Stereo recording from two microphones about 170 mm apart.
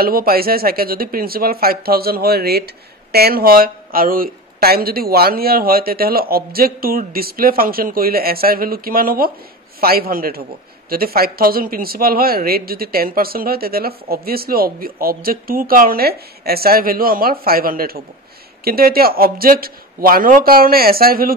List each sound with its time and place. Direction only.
0.0 s speech: 60° right (ahead or behind)